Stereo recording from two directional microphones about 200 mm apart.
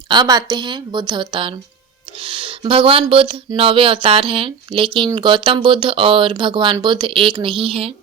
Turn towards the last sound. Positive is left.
turn(degrees=-30)  # may be behind; listen again after turning